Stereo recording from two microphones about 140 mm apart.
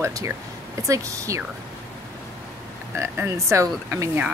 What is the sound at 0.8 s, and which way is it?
Frog, 25° right (ahead or behind).